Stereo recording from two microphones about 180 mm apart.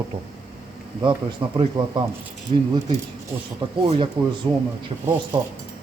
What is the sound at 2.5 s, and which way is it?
Speech, 35° right (ahead or behind).